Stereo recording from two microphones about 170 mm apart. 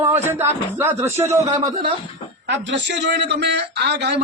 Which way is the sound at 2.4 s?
90° right.